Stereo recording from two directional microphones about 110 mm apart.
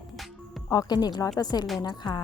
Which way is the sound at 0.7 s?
35° left (ahead or behind).